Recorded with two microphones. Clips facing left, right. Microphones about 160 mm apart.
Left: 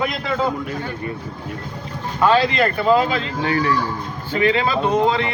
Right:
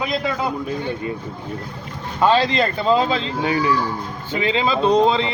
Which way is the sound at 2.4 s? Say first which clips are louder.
Left 1 dB; 25° right (ahead or behind).